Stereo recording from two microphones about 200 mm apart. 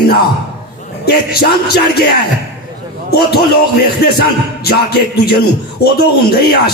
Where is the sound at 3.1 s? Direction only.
50° left (ahead or behind).